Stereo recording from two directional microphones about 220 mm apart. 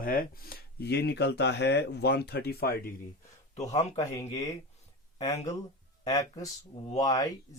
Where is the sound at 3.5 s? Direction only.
30° left (ahead or behind).